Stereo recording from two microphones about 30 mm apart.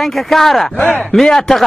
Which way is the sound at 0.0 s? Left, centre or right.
Centre.